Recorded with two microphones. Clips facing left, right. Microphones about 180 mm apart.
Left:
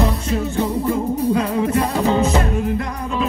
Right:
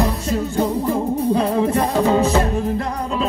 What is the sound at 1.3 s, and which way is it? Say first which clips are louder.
Music: right 1 dB; 30° right (ahead or behind).